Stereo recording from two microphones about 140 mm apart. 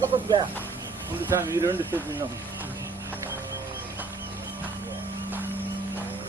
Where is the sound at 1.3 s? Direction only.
20° right (ahead or behind).